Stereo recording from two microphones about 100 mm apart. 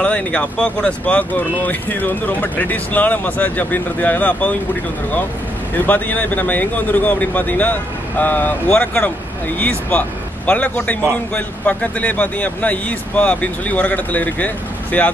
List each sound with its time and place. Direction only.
0.0 s speech: 10° left (ahead or behind)
5.8 s speech: 20° left (ahead or behind)